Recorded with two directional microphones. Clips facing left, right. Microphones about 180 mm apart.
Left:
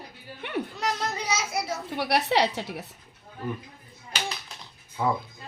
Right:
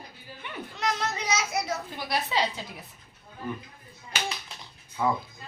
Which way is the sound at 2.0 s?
70° left (ahead or behind).